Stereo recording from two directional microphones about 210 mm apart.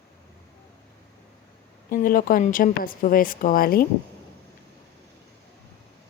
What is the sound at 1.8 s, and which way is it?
Speech, 45° left (ahead or behind).